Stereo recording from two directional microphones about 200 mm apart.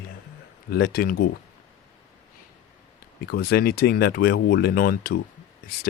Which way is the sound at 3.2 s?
55° left (ahead or behind).